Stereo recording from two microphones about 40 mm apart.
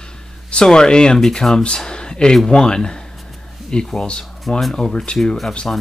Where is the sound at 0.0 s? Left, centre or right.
Left.